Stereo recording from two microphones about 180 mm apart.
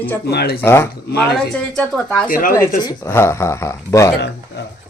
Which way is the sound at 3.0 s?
15° left (ahead or behind).